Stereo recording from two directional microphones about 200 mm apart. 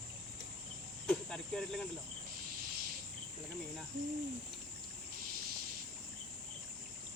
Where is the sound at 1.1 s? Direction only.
5° left (ahead or behind).